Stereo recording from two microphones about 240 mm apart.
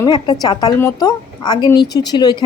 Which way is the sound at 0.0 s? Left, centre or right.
Centre.